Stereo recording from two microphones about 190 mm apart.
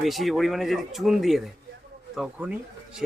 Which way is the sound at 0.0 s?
Centre (ahead or behind).